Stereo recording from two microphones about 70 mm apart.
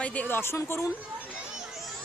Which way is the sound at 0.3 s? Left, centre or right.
Left.